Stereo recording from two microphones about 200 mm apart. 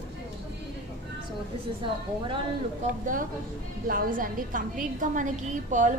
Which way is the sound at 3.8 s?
45° right (ahead or behind).